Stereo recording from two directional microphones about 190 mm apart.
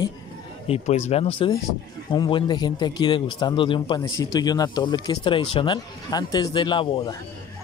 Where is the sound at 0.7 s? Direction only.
35° left (ahead or behind).